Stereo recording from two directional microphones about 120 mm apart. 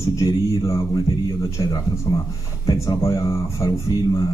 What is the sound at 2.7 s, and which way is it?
A man's voice, 25° left (ahead or behind).